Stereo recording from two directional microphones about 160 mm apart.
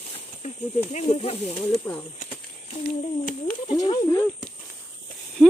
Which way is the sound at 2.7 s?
45° left (ahead or behind).